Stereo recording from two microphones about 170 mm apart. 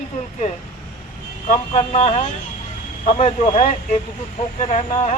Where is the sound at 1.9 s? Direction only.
40° left (ahead or behind).